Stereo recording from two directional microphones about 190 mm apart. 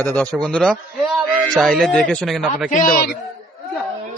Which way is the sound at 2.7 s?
45° left (ahead or behind).